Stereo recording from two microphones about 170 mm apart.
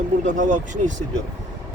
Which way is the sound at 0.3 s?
45° right (ahead or behind).